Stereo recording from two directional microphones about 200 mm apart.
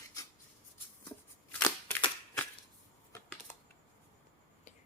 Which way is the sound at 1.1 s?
10° left (ahead or behind).